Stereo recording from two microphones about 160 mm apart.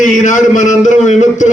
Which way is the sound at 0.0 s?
50° left (ahead or behind).